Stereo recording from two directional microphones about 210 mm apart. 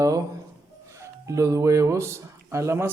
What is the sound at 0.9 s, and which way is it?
Music, 15° right (ahead or behind).